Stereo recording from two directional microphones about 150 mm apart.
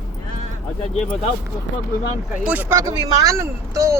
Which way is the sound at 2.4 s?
10° right (ahead or behind).